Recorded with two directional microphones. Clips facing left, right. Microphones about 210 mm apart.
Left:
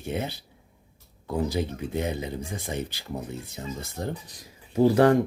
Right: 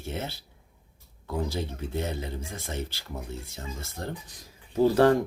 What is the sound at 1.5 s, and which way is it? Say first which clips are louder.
Speech: left 4 dB; 15° left (ahead or behind).